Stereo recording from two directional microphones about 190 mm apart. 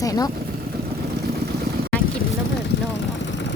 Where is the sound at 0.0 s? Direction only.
20° left (ahead or behind).